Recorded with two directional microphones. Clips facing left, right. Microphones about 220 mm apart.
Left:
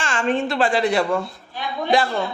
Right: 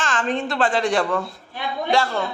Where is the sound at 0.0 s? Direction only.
10° left (ahead or behind).